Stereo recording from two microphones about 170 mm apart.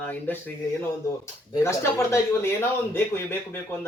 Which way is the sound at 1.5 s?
15° left (ahead or behind).